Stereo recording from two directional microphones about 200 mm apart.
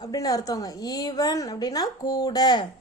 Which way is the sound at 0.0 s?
20° left (ahead or behind).